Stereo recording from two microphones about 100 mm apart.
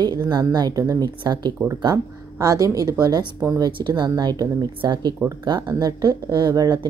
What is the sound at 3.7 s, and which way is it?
Speech, 50° right (ahead or behind).